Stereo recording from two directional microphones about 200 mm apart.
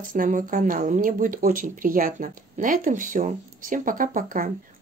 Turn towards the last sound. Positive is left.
turn(degrees=-40)  # may be behind; listen again after turning